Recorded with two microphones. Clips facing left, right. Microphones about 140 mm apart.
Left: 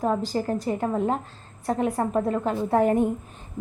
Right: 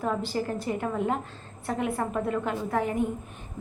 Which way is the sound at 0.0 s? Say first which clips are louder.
Left 4 dB; 35° left (ahead or behind).